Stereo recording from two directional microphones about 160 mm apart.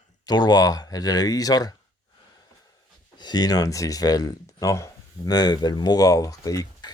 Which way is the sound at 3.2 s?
25° left (ahead or behind).